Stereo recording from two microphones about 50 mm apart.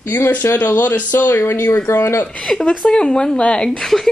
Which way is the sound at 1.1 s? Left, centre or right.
Left.